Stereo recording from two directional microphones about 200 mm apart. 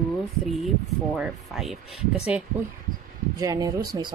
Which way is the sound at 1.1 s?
5° right (ahead or behind).